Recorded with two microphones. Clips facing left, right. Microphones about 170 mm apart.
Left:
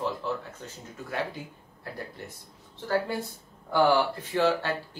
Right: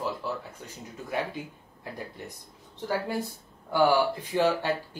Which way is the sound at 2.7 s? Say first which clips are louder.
Left 2 dB; 15° right (ahead or behind).